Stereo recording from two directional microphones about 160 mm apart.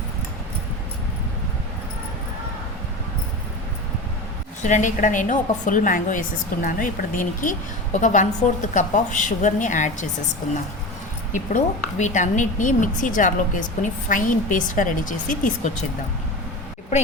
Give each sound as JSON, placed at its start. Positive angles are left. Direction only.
{"t": 4.6, "sound": "a woman's voice", "side_deg": 50}
{"t": 11.3, "sound": "speech", "side_deg": 50}